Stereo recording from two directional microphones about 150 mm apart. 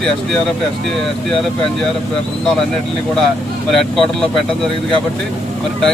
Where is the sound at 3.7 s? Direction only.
Centre (ahead or behind).